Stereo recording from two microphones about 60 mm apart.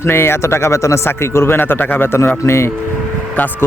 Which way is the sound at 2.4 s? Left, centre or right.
Left.